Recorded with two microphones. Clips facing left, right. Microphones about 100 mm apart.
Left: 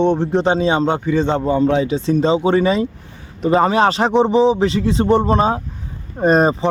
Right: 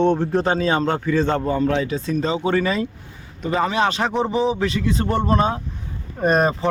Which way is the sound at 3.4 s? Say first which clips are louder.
Left 6 dB; 35° left (ahead or behind).